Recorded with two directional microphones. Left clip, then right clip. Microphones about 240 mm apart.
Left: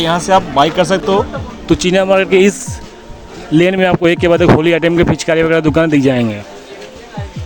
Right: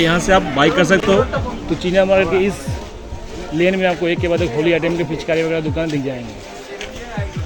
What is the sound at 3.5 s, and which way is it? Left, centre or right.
Speech, left.